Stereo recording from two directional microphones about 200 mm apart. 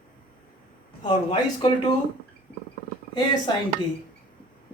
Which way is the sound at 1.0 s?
25° left (ahead or behind).